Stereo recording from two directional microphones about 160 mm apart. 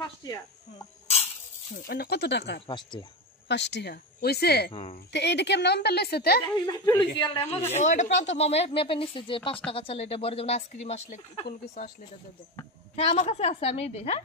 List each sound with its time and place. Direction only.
0.2 s speech: 25° left (ahead or behind)
1.9 s a woman's voice: 80° left
2.6 s speech: 30° left (ahead or behind)
3.4 s a woman's voice: 90° left
4.7 s speech: 40° left (ahead or behind)
5.1 s a woman's voice: 90° left
6.6 s speech: 25° left (ahead or behind)
7.7 s speech: 50° left (ahead or behind)
13.0 s speech: 40° left (ahead or behind)